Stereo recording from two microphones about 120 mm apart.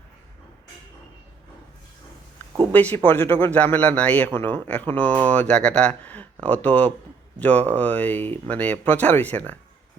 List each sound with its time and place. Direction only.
2.7 s a man's voice: 15° left (ahead or behind)